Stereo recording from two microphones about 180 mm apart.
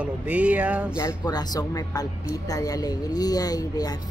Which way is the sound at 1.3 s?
20° left (ahead or behind).